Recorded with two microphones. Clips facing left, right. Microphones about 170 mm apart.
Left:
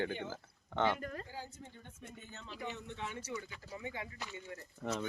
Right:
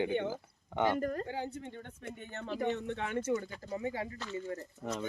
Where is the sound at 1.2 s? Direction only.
70° right (ahead or behind); by 4.1 s 40° right (ahead or behind).